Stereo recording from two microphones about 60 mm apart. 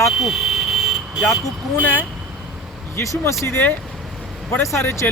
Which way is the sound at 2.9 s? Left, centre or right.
Left.